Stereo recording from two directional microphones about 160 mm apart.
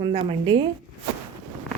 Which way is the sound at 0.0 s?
30° right (ahead or behind).